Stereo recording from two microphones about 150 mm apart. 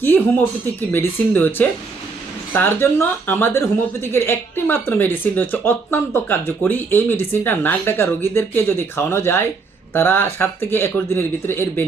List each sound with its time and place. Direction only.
0.9 s speech: 15° left (ahead or behind)